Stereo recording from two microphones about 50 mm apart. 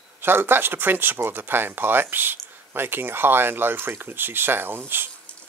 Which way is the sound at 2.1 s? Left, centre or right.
Right.